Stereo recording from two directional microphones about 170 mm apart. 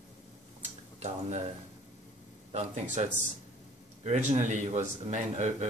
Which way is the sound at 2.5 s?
40° right (ahead or behind).